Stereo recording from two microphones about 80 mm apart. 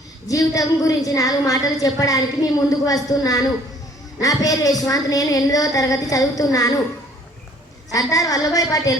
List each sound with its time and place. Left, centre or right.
0.3 s a woman's voice: left
7.9 s a woman's voice: left